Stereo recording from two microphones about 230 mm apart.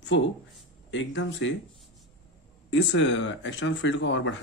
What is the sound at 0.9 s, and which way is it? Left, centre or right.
Speech, left.